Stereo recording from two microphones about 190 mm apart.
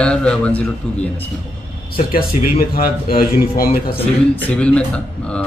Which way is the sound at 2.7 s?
50° left (ahead or behind).